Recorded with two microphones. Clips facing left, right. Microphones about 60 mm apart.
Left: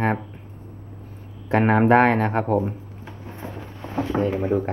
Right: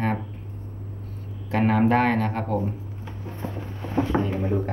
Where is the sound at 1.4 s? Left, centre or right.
Left.